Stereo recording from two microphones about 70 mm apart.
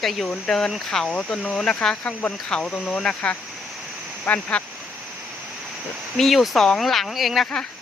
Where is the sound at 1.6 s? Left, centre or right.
Centre.